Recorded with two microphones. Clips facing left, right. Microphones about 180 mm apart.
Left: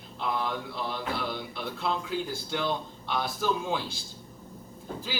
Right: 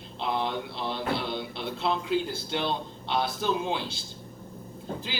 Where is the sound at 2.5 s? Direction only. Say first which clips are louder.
Right 1 dB; 25° right (ahead or behind).